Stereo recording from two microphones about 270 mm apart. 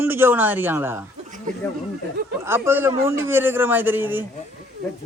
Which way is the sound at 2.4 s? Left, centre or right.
Centre.